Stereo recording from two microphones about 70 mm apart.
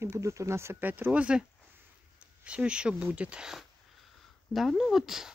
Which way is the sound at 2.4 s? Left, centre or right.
Centre.